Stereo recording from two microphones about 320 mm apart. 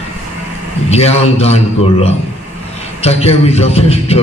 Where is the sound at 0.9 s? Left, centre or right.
Centre.